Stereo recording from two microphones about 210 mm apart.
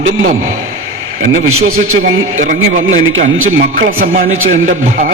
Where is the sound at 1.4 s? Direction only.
90° right.